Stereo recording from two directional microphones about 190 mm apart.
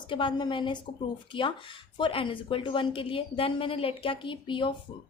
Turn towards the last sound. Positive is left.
turn(degrees=25)  # may be behind; listen again after turning